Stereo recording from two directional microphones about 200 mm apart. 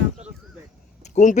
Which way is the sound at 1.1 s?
40° left (ahead or behind).